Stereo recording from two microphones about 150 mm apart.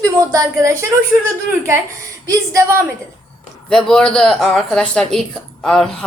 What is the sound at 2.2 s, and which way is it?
Speech, 20° right (ahead or behind).